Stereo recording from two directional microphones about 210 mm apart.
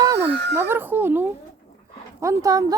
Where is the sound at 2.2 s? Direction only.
15° right (ahead or behind).